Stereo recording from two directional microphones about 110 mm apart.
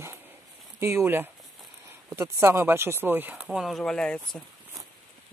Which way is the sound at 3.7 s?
5° left (ahead or behind).